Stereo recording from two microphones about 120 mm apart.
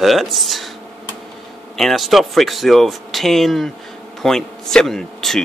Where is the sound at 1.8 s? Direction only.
Centre (ahead or behind).